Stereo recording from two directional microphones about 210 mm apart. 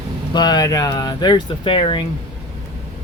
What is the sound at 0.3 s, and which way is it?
Speech, 20° left (ahead or behind).